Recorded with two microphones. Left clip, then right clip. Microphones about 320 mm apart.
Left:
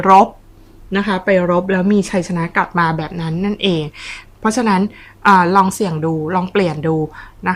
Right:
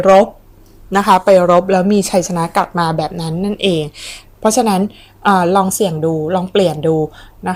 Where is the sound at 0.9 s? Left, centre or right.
Centre.